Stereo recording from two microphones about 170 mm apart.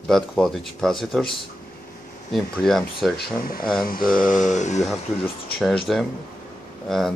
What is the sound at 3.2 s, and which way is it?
Speech, 60° left (ahead or behind).